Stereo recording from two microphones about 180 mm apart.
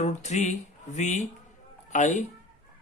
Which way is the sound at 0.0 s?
40° left (ahead or behind).